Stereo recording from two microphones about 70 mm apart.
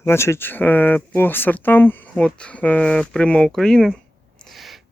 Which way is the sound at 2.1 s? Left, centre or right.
Centre.